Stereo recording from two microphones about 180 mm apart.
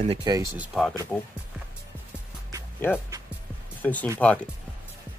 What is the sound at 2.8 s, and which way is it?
Speech, 10° left (ahead or behind).